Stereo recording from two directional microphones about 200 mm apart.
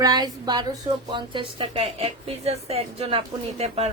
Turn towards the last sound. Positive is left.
turn(degrees=-30)  # may be behind; listen again after turning